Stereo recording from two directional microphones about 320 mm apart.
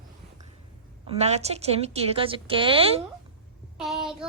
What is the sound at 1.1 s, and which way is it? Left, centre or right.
A woman's voice, centre.